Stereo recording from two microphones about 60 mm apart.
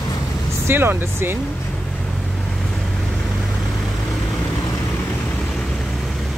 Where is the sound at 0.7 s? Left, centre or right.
Right.